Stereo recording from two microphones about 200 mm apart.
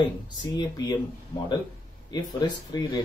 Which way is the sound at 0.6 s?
20° left (ahead or behind).